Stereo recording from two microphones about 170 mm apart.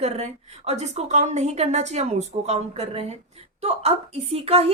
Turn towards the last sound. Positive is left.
turn(degrees=-35)  # may be behind; listen again after turning